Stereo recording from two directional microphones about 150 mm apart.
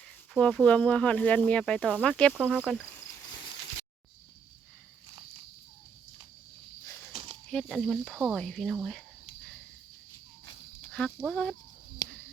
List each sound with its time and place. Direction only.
0.3 s speech: 5° left (ahead or behind)
2.4 s speech: 5° right (ahead or behind)
7.1 s a sound: 35° right (ahead or behind)
7.4 s speech: 5° left (ahead or behind)
11.3 s speech: 5° left (ahead or behind)